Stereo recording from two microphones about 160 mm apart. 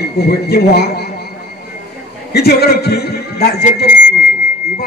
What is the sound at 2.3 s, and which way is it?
A man's voice, 80° left.